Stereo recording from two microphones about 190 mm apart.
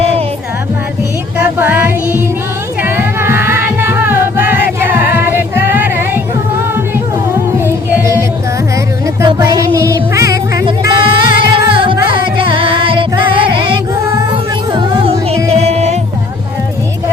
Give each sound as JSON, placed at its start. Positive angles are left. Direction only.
{"t": 1.4, "sound": "music", "side_deg": -10}
{"t": 7.3, "sound": "music", "side_deg": -10}
{"t": 9.2, "sound": "music", "side_deg": -20}